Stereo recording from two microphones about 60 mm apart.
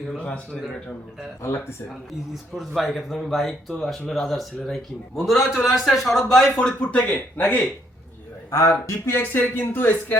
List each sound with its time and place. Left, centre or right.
1.4 s speech: left
2.3 s a man's voice: centre
5.5 s a man's voice: centre
6.6 s speech: centre
7.1 s speech: left
8.4 s speech: left
8.7 s speech: left